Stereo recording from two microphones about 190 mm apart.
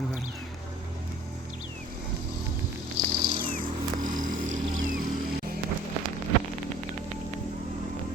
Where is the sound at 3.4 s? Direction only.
45° right (ahead or behind).